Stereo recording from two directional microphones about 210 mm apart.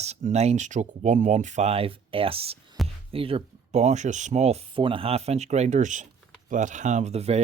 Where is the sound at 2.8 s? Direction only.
Centre (ahead or behind).